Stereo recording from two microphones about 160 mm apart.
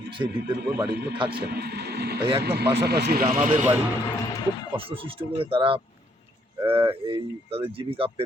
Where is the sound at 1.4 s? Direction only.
90° right.